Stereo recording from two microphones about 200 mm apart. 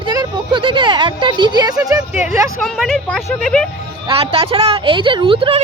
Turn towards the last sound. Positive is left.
turn(degrees=-25)  # may be behind; listen again after turning